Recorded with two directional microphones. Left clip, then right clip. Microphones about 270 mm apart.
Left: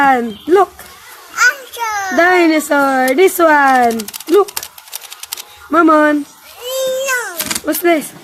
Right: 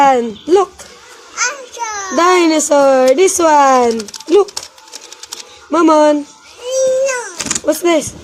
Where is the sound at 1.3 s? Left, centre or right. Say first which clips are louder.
Left 6 dB; centre.